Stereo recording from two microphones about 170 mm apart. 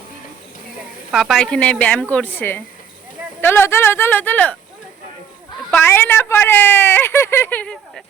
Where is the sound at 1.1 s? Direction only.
Centre (ahead or behind).